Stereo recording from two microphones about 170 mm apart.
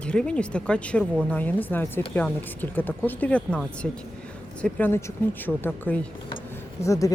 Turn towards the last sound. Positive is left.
turn(degrees=20)  # may be behind; listen again after turning